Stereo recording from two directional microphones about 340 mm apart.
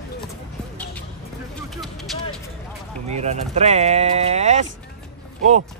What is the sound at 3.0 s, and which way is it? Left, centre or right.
Speech, centre.